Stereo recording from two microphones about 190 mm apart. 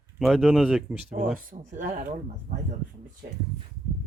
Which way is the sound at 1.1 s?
45° right (ahead or behind).